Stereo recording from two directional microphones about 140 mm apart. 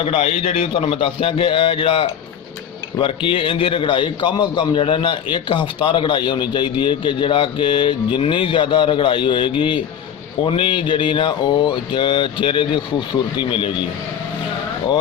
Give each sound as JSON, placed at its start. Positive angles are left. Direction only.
{"t": 0.0, "sound": "a man's voice", "side_deg": 45}